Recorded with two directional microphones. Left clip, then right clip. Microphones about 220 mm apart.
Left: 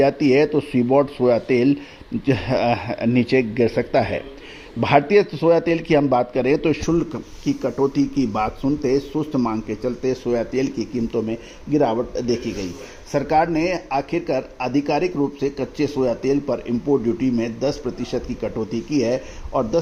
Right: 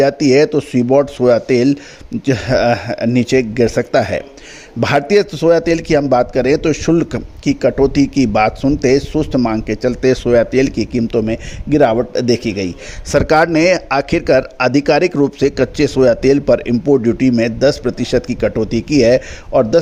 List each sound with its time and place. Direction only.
0.0 s a man's voice: 60° right (ahead or behind)
6.8 s a man's voice: 45° right (ahead or behind)